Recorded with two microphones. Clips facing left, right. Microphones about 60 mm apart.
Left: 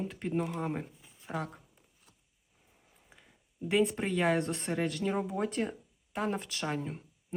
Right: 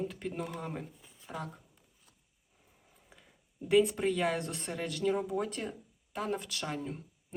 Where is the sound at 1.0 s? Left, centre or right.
Centre.